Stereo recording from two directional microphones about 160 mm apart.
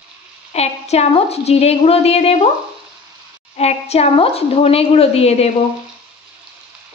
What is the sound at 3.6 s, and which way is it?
Speech, 40° left (ahead or behind).